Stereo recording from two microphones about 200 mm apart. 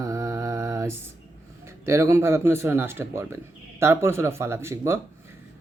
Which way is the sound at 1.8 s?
15° right (ahead or behind).